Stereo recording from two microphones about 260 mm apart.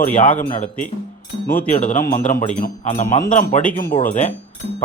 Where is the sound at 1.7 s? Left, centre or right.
Left.